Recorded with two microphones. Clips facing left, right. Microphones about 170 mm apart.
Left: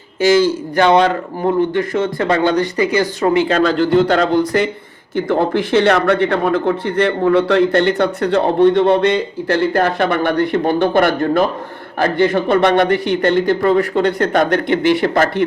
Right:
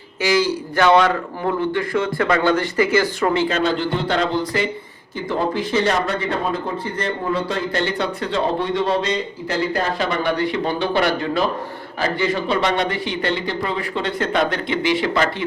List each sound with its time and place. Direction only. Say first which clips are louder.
0.3 s a man's voice: left 6 dB; 50° left (ahead or behind)
2.0 s speech: left 3 dB; 30° left (ahead or behind)
2.6 s speech: left 2 dB; 20° left (ahead or behind)
3.5 s a man's voice: left 7 dB; 45° left (ahead or behind)
5.1 s a man's voice: left 6 dB; 65° left (ahead or behind)